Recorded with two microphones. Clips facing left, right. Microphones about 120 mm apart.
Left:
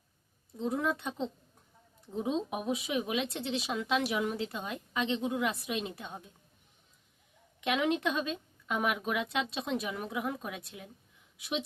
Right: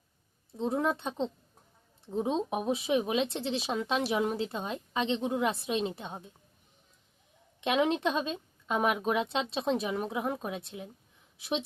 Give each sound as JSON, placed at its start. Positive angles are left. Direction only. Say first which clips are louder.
{"t": 0.5, "sound": "speech", "louder": "right 2 dB", "side_deg": -30}
{"t": 7.6, "sound": "speech", "louder": "right 2 dB", "side_deg": -30}